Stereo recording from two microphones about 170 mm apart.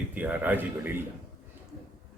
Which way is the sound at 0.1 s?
10° right (ahead or behind).